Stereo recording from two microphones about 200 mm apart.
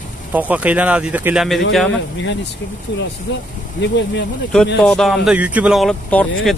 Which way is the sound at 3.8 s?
65° left (ahead or behind).